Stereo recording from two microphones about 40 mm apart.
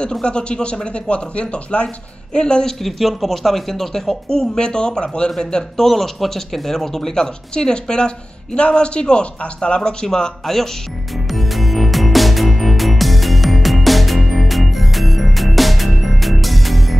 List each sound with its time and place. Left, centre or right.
0.0 s speech: left
2.8 s speech: centre
11.2 s music: centre